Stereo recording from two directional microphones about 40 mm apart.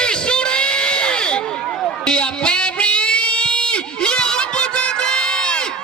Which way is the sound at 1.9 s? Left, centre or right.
Left.